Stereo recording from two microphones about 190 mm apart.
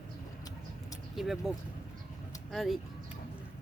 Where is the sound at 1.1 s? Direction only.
Centre (ahead or behind).